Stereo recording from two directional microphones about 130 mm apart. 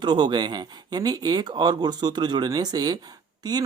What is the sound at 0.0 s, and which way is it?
Speech, 35° right (ahead or behind).